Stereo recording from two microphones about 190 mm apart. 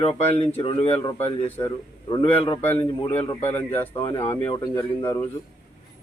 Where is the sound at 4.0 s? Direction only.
30° left (ahead or behind).